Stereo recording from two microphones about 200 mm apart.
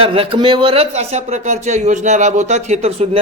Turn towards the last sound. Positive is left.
turn(degrees=-30)  # may be behind; listen again after turning